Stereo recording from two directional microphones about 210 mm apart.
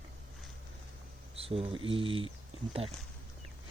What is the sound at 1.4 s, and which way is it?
Speech, 25° right (ahead or behind).